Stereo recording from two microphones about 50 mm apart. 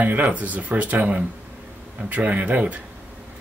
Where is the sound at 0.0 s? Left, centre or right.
Right.